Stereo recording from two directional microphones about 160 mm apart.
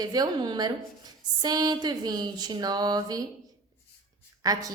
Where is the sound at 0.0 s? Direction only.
25° right (ahead or behind).